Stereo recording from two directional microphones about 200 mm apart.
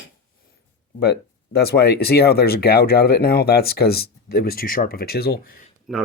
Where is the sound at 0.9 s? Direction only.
50° left (ahead or behind).